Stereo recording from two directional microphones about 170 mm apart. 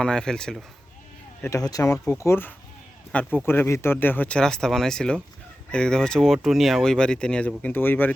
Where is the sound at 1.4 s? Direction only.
20° left (ahead or behind).